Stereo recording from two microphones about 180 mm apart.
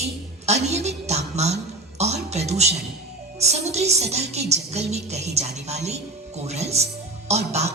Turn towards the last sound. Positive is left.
turn(degrees=-35)  # may be behind; listen again after turning